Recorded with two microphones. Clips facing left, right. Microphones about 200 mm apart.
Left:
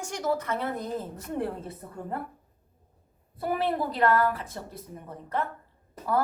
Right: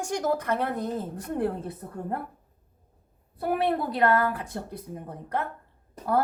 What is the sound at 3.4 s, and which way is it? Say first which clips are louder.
Speech: right 2 dB; 60° right (ahead or behind).